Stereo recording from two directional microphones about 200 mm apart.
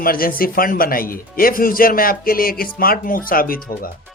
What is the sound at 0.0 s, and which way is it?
Speech, 45° left (ahead or behind).